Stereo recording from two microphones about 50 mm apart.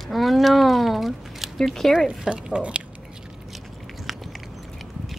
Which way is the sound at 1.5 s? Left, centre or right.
Centre.